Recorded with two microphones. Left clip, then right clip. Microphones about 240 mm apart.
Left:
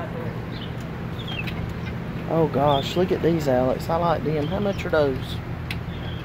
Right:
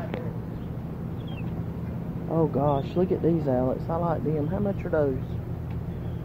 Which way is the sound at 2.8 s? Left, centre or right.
Centre.